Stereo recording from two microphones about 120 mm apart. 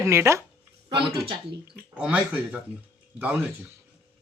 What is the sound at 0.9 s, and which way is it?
Speech, 45° right (ahead or behind).